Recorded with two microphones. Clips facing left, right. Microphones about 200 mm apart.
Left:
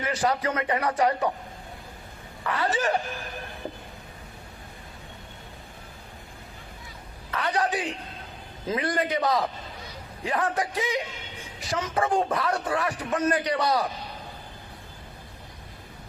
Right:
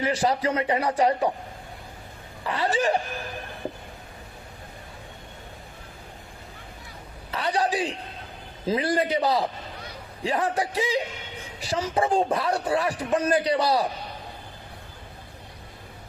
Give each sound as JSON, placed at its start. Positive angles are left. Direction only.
{"t": 0.0, "sound": "a man's voice", "side_deg": -30}
{"t": 2.4, "sound": "a man's voice", "side_deg": -30}
{"t": 7.3, "sound": "a man's voice", "side_deg": -30}